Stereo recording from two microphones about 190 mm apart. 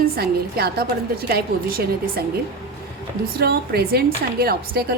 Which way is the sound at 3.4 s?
55° right (ahead or behind).